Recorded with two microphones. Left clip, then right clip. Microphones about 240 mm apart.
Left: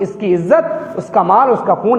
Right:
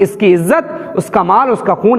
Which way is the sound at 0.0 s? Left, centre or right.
Right.